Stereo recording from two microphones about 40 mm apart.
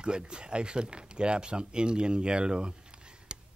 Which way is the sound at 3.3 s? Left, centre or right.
Right.